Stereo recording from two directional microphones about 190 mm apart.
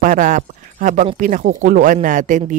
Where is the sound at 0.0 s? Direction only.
45° right (ahead or behind).